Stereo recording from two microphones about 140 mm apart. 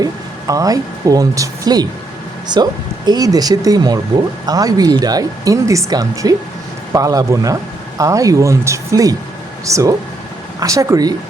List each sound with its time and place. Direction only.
0.0 s speech: 25° right (ahead or behind)